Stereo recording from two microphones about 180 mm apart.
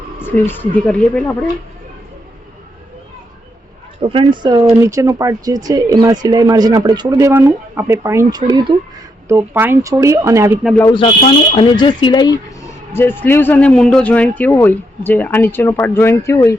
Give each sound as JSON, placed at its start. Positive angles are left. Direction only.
{"t": 0.2, "sound": "a man's voice", "side_deg": 10}
{"t": 4.0, "sound": "speech", "side_deg": -30}
{"t": 4.8, "sound": "speech", "side_deg": -15}
{"t": 9.3, "sound": "speech", "side_deg": -10}
{"t": 10.8, "sound": "speech", "side_deg": 20}
{"t": 12.9, "sound": "a man's voice", "side_deg": 10}